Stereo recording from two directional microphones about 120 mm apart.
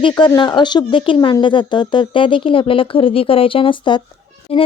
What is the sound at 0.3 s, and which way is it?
Speech, 40° left (ahead or behind).